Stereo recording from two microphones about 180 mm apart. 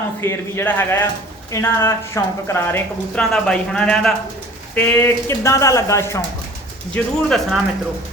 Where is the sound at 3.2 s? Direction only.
5° left (ahead or behind).